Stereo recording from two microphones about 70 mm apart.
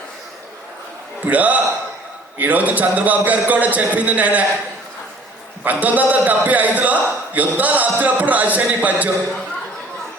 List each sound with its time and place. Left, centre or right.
1.2 s a man's voice: right
5.6 s a man's voice: right